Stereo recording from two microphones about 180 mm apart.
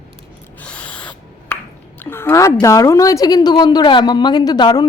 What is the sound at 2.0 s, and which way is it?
A woman's voice, 10° left (ahead or behind).